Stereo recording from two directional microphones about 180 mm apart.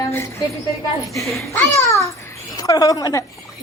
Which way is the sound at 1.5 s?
15° left (ahead or behind).